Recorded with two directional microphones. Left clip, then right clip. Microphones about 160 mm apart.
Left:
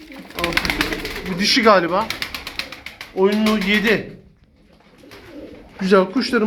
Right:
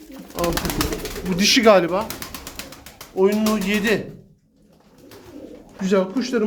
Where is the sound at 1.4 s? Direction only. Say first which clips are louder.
Even; 30° right (ahead or behind).